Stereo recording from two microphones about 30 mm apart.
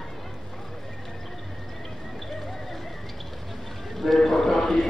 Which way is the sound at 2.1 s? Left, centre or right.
Centre.